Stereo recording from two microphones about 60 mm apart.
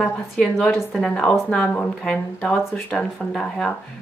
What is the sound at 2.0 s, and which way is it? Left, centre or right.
A woman's voice, centre.